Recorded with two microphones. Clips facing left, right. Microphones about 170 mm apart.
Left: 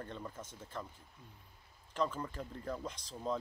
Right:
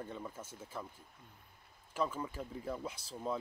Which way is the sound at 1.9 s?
5° right (ahead or behind).